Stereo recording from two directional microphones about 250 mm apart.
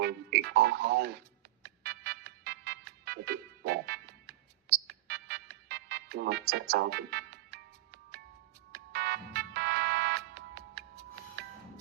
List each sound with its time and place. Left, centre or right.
0.0 s music: right
8.7 s music: right